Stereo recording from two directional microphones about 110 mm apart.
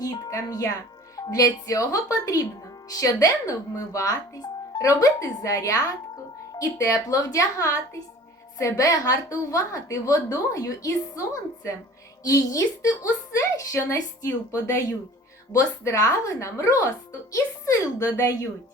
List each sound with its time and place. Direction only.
0.0 s a woman's voice: 35° left (ahead or behind)
12.2 s a woman's voice: 35° left (ahead or behind)